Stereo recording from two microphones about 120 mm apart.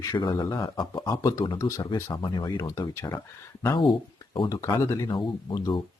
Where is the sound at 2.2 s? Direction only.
40° left (ahead or behind).